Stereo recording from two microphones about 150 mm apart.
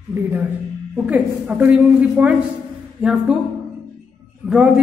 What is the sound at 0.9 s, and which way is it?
Speech, 10° right (ahead or behind).